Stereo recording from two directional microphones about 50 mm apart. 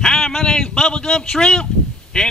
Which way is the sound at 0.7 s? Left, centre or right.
Centre.